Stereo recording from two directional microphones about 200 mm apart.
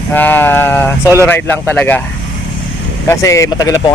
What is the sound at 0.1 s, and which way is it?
Speech, 10° left (ahead or behind).